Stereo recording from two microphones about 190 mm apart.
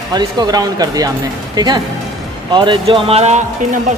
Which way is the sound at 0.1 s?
20° right (ahead or behind).